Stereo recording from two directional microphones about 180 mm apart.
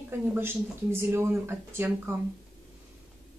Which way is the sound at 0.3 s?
10° right (ahead or behind).